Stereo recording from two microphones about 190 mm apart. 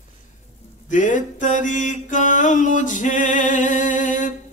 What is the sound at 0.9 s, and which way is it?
Mantra, 40° left (ahead or behind).